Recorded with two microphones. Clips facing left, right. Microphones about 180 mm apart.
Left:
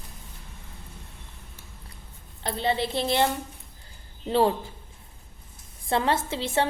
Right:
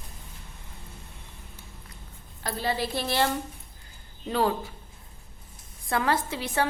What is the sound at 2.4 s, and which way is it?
A woman's voice, 25° left (ahead or behind).